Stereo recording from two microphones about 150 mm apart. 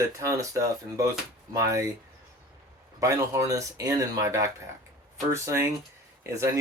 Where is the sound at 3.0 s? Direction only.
20° right (ahead or behind).